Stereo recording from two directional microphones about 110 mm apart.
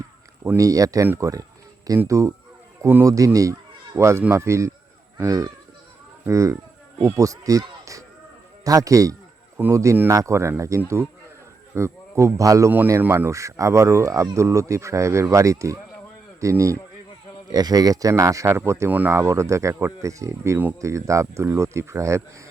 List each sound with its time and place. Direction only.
0.5 s a man's voice: 30° right (ahead or behind)